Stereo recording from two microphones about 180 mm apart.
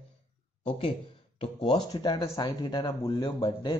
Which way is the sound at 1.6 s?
25° left (ahead or behind).